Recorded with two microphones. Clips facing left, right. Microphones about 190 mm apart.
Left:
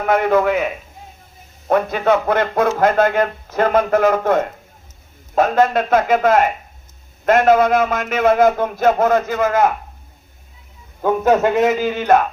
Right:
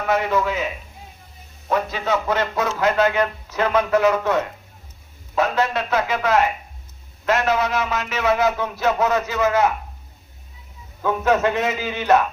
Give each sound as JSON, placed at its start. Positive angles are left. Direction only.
{"t": 0.0, "sound": "a man's voice", "side_deg": 55}
{"t": 11.0, "sound": "a man's voice", "side_deg": 40}